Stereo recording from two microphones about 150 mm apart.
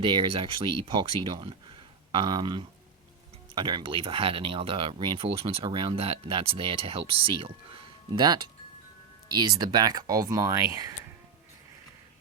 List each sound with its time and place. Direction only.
0.0 s speech: 35° right (ahead or behind)